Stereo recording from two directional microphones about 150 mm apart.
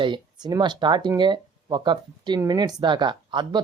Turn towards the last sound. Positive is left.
turn(degrees=-30)  # may be behind; listen again after turning